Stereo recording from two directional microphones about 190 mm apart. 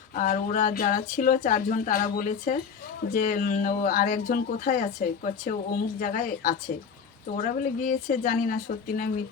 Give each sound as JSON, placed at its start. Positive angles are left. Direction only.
{"t": 0.2, "sound": "speech", "side_deg": 45}